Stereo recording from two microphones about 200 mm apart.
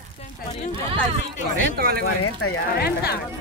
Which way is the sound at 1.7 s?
50° right (ahead or behind).